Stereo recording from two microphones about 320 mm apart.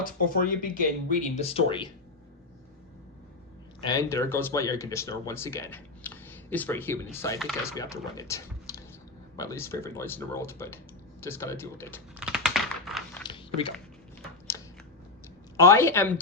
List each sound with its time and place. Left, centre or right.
0.0 s speech: left
3.8 s speech: centre
11.2 s typing: centre
13.2 s a sound: centre
15.5 s speech: centre